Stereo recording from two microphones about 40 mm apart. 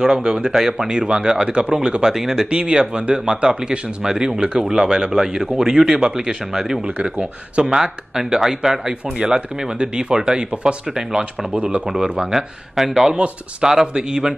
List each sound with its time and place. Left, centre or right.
0.0 s speech: centre
0.8 s speech: right
11.9 s speech: centre